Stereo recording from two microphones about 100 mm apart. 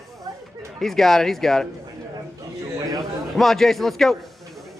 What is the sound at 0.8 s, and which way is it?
Speech, 5° left (ahead or behind).